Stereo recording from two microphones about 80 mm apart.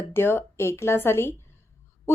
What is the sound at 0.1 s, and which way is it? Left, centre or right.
A woman's voice, left.